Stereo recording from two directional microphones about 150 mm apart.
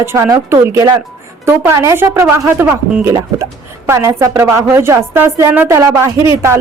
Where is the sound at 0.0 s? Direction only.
15° right (ahead or behind).